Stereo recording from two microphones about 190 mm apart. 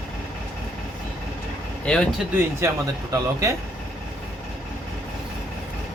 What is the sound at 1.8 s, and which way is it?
Speech, 5° left (ahead or behind).